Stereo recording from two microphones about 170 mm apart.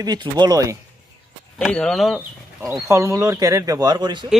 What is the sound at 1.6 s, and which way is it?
Speech, 5° left (ahead or behind).